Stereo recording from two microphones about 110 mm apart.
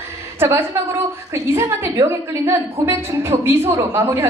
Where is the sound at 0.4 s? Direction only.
20° right (ahead or behind).